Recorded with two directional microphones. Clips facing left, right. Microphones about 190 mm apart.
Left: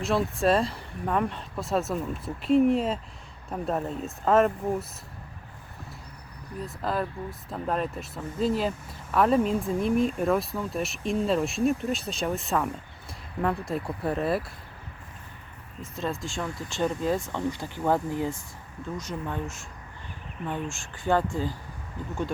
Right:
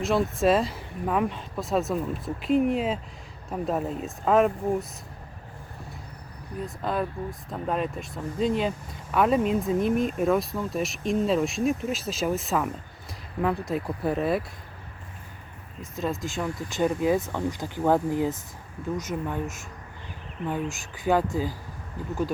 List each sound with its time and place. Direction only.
0.0 s speech: centre (ahead or behind)
6.8 s speech: centre (ahead or behind)
15.8 s speech: centre (ahead or behind); by 19.5 s 20° right (ahead or behind)
21.0 s speech: 5° right (ahead or behind)